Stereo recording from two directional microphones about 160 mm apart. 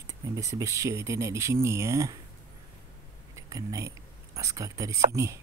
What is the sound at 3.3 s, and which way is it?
Speech, 20° right (ahead or behind).